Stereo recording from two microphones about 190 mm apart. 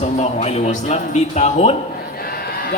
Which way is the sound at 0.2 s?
35° left (ahead or behind).